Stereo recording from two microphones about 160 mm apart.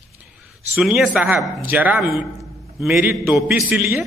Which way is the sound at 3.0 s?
15° right (ahead or behind).